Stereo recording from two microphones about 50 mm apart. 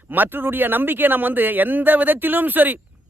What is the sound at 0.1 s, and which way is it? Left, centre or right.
Speech, right.